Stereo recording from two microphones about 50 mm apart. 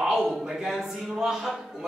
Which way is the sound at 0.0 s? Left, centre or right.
Centre.